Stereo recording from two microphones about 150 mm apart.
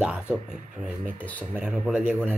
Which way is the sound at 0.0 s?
10° right (ahead or behind).